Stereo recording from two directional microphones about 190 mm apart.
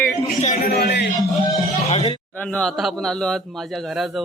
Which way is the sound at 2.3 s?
5° left (ahead or behind).